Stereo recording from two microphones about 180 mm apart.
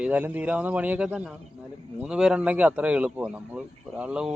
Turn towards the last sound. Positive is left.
turn(degrees=-5)  # may be behind; listen again after turning